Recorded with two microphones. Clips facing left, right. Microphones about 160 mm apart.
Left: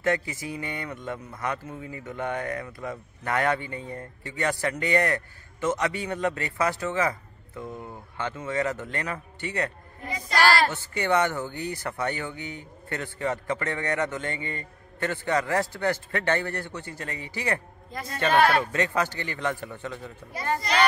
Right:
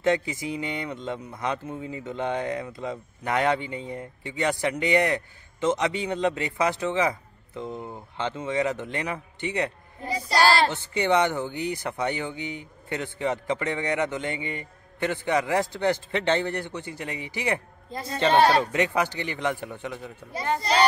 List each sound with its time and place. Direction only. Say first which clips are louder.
0.0 s speech: right 3 dB; 20° right (ahead or behind)
10.0 s speech: right 1 dB; 35° right (ahead or behind)
18.7 s speech: right 2 dB; 15° right (ahead or behind)